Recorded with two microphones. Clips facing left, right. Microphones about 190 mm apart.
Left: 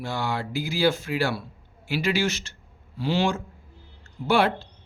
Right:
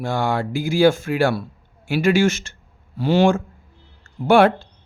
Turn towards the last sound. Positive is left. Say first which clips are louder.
# right 8 dB
turn(degrees=-50)  # may be behind; listen again after turning